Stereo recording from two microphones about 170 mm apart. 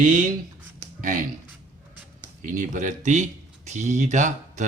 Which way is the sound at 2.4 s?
50° right (ahead or behind).